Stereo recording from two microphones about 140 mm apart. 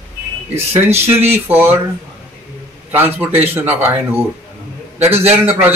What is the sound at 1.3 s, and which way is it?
Speech, 15° right (ahead or behind).